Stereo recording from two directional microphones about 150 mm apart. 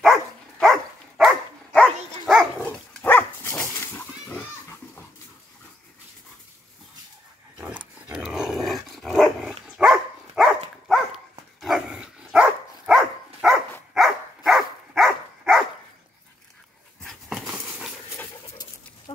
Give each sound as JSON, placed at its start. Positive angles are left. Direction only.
{"t": 0.0, "sound": "dog", "side_deg": 0}
{"t": 7.5, "sound": "dog", "side_deg": -5}
{"t": 17.0, "sound": "dog", "side_deg": 0}
{"t": 18.1, "sound": "dog", "side_deg": 15}
{"t": 19.1, "sound": "pig", "side_deg": 35}